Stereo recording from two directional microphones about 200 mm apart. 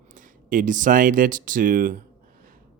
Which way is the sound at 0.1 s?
40° right (ahead or behind).